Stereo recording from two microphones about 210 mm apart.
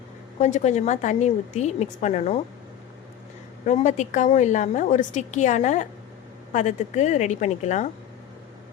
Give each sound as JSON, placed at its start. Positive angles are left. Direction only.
{"t": 0.3, "sound": "a woman's voice", "side_deg": 35}
{"t": 3.7, "sound": "a woman's voice", "side_deg": 35}